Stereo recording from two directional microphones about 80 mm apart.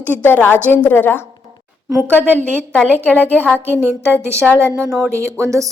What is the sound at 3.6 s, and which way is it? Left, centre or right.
A woman's voice, right.